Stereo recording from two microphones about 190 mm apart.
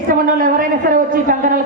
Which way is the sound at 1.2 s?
45° right (ahead or behind).